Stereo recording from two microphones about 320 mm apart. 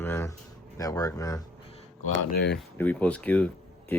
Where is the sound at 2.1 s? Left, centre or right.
Left.